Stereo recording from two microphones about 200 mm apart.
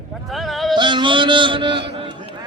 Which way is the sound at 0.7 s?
25° right (ahead or behind).